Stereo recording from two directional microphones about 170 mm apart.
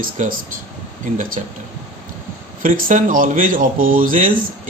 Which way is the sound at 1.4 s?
40° right (ahead or behind).